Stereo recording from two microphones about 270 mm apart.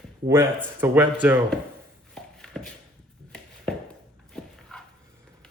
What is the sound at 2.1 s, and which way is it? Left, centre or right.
Shuffle, centre.